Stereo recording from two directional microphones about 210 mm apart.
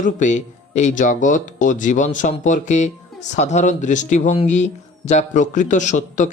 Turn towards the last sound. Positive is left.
turn(degrees=35)  # may be behind; listen again after turning